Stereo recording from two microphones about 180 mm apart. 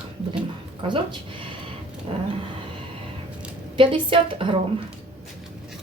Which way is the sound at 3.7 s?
30° right (ahead or behind).